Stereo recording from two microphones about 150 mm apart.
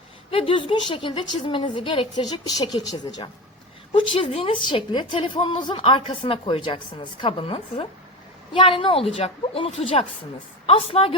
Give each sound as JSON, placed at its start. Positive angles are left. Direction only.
{"t": 0.3, "sound": "a woman's voice", "side_deg": 35}